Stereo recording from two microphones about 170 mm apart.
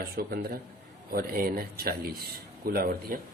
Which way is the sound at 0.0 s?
60° right (ahead or behind).